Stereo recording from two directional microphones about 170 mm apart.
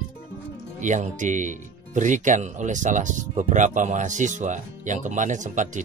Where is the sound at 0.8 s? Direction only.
45° right (ahead or behind).